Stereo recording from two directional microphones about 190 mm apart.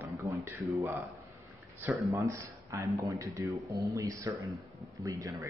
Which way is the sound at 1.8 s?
15° right (ahead or behind).